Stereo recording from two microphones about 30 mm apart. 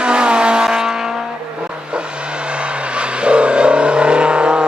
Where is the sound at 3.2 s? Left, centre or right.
Right.